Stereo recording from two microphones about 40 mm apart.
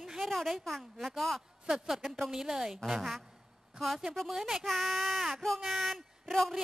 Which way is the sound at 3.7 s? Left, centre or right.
Centre.